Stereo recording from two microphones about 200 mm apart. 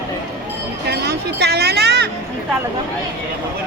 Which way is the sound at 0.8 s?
55° right (ahead or behind).